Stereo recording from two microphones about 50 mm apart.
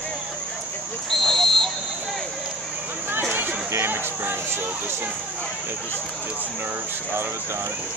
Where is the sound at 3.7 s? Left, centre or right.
Right.